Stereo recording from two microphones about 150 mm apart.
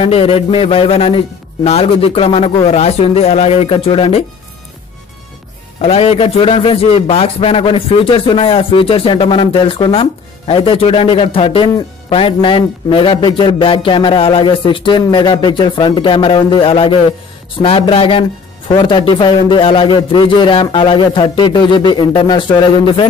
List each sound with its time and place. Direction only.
0.0 s a man's voice: 40° left (ahead or behind)
5.8 s a man's voice: 45° left (ahead or behind)